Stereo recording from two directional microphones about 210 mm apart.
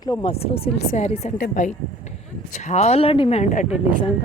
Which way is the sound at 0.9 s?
30° left (ahead or behind).